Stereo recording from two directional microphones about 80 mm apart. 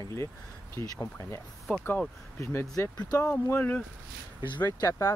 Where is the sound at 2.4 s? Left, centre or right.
Left.